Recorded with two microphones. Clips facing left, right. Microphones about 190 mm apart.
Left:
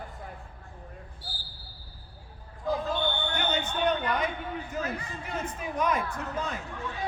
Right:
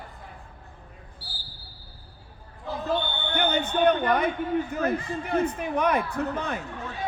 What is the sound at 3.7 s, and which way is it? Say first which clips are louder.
A man's voice: right 7 dB; 55° right (ahead or behind).